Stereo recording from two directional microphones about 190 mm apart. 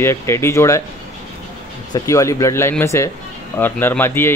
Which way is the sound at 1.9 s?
15° left (ahead or behind).